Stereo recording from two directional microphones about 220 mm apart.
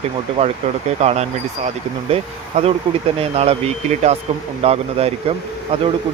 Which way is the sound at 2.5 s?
30° right (ahead or behind).